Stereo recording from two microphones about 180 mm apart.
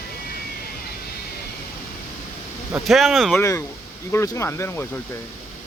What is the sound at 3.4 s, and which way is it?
Speech, 15° left (ahead or behind).